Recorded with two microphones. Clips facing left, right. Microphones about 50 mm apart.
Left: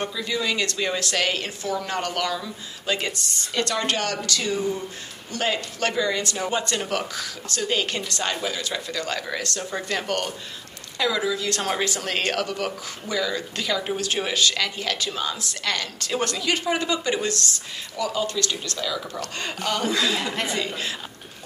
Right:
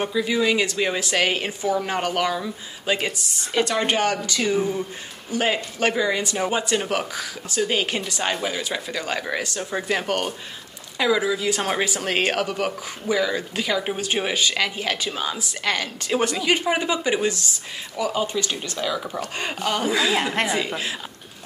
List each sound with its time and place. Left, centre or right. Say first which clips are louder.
0.0 s speech: right 5 dB; centre